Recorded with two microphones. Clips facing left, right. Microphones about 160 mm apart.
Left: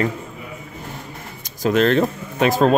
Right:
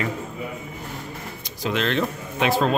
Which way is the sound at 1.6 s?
45° left (ahead or behind).